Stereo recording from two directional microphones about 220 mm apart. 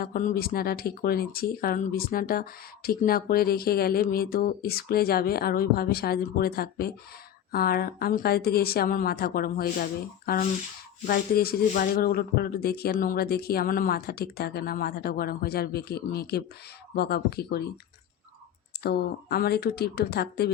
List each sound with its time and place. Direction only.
0.0 s speech: 40° left (ahead or behind)
18.8 s speech: 45° left (ahead or behind)